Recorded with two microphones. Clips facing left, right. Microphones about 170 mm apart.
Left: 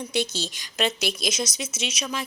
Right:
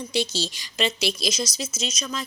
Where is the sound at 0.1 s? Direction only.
50° left (ahead or behind).